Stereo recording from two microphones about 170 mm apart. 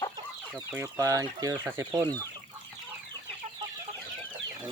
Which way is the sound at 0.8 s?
15° right (ahead or behind).